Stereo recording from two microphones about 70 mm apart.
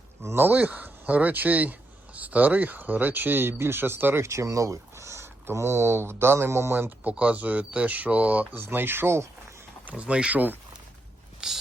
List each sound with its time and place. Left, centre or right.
0.2 s speech: right
7.0 s speech: right
8.6 s speech: right
9.8 s speech: centre
11.4 s a sound: centre